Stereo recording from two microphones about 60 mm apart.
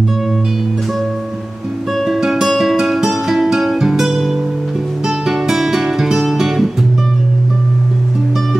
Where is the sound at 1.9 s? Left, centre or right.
Centre.